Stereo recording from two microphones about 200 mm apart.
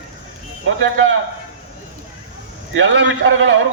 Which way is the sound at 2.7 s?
65° right (ahead or behind).